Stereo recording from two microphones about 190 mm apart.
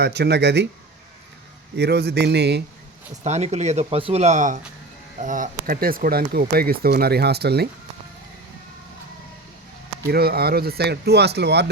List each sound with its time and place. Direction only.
0.0 s speech: 60° right (ahead or behind)
1.7 s speech: 60° right (ahead or behind)
3.2 s speech: 35° right (ahead or behind); by 7.7 s 60° right (ahead or behind)
10.1 s speech: 55° right (ahead or behind)